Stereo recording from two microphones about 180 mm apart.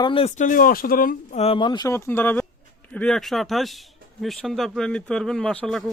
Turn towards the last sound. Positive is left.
turn(degrees=0)  # may be behind; listen again after turning